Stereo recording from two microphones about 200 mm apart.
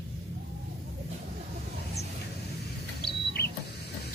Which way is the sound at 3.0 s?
55° left (ahead or behind).